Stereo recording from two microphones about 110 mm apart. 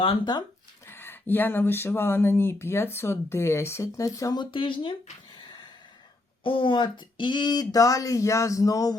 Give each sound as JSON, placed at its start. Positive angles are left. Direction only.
{"t": 0.9, "sound": "speech", "side_deg": 20}
{"t": 4.4, "sound": "speech", "side_deg": 50}
{"t": 6.4, "sound": "speech", "side_deg": 50}